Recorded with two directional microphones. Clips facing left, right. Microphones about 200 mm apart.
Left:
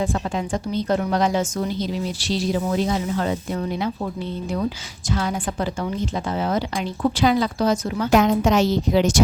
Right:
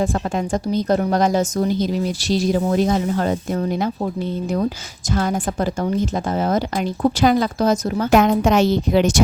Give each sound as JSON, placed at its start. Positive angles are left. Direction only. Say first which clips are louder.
{"t": 0.0, "sound": "a woman's voice", "louder": "right 3 dB", "side_deg": -45}